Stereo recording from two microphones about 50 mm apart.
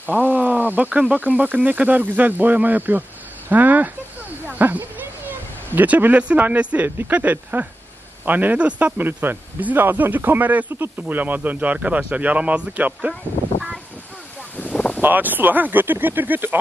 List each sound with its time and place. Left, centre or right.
0.0 s speech: right
9.0 s speech: right
14.6 s a sound: left
15.0 s speech: right